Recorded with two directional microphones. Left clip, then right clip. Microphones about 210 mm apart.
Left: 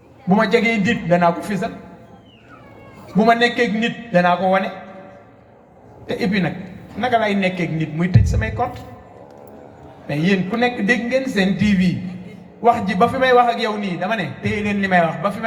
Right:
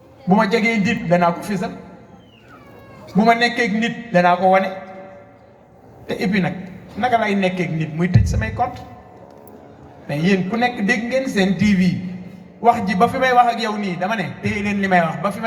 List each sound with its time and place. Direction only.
0.3 s a man's voice: 30° right (ahead or behind)
3.2 s a man's voice: 30° right (ahead or behind)
6.1 s a man's voice: 30° right (ahead or behind)
10.1 s a man's voice: 30° right (ahead or behind)